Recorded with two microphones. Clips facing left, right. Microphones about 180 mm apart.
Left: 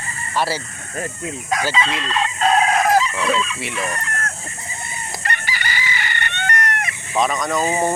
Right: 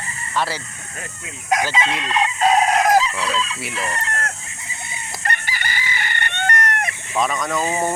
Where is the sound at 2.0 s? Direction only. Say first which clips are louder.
Right 4 dB; 15° right (ahead or behind).